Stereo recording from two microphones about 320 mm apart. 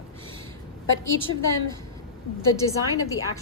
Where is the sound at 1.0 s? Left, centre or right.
Left.